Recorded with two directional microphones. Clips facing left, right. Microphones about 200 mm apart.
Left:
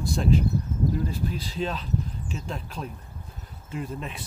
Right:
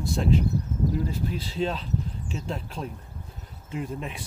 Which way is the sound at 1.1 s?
25° right (ahead or behind).